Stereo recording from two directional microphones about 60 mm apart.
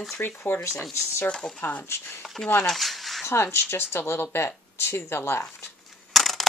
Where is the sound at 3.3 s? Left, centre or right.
Left.